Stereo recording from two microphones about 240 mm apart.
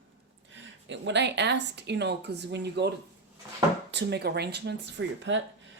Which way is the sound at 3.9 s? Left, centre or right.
Right.